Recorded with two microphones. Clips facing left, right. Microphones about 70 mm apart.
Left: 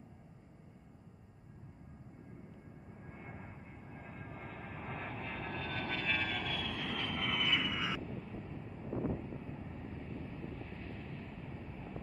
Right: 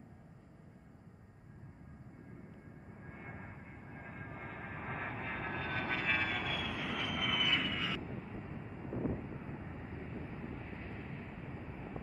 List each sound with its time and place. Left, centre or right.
2.9 s vehicle: centre
8.0 s vehicle: right